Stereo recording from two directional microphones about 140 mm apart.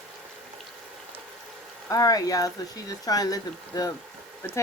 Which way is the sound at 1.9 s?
25° left (ahead or behind).